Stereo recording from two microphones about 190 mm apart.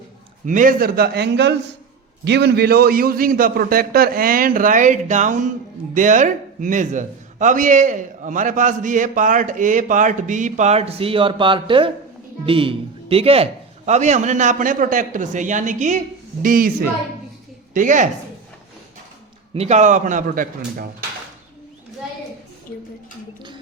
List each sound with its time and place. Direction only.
0.4 s a man's voice: 45° right (ahead or behind)
17.7 s a man's voice: 40° right (ahead or behind)
19.5 s a man's voice: 35° right (ahead or behind)